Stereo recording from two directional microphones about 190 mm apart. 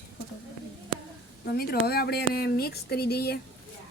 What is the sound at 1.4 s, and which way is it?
Speech, 55° left (ahead or behind).